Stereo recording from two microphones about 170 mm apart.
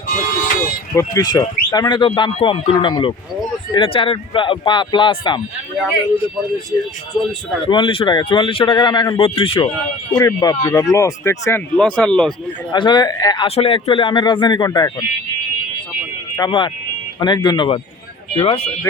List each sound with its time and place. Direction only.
0.1 s a sound: 55° left (ahead or behind)
0.9 s speech: 20° left (ahead or behind)
7.7 s speech: 30° left (ahead or behind); by 12.3 s 5° left (ahead or behind)
12.7 s speech: 25° left (ahead or behind)
16.4 s speech: 30° left (ahead or behind)